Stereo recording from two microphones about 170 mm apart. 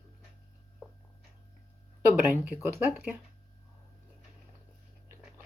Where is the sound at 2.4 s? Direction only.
10° right (ahead or behind).